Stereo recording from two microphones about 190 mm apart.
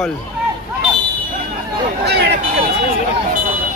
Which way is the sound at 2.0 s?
60° right (ahead or behind).